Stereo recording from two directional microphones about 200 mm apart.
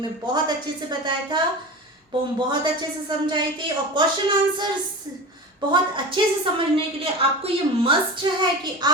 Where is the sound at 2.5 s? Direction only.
20° right (ahead or behind).